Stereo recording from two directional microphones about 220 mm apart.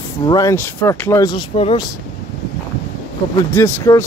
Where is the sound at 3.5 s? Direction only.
10° left (ahead or behind).